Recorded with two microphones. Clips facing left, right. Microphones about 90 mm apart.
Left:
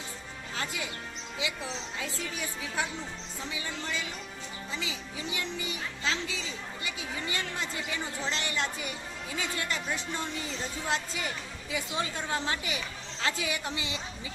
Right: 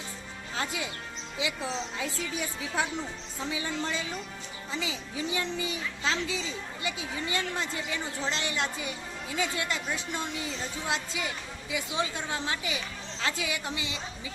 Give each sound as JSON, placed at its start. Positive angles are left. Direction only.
{"t": 0.5, "sound": "music", "side_deg": -25}
{"t": 1.4, "sound": "speech", "side_deg": -25}
{"t": 3.5, "sound": "speech", "side_deg": -25}
{"t": 10.8, "sound": "a woman's voice", "side_deg": -15}
{"t": 13.2, "sound": "a woman's voice", "side_deg": 25}